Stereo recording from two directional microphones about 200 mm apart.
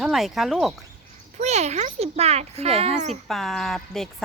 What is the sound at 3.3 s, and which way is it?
Speech, centre (ahead or behind).